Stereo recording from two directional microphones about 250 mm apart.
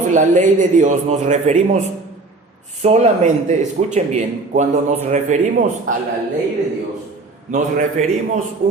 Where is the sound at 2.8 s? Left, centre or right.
Right.